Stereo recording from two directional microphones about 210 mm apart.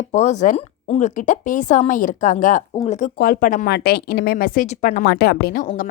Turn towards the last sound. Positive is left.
turn(degrees=40)  # may be behind; listen again after turning